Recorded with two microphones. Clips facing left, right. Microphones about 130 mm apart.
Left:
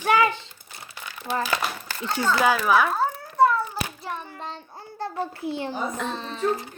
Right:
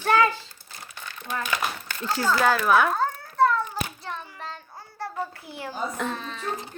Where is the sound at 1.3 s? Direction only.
30° left (ahead or behind).